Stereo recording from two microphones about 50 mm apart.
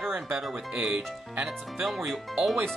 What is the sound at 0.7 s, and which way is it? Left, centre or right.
Speech, centre.